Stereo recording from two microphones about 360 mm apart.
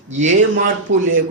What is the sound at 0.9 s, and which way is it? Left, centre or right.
Speech, right.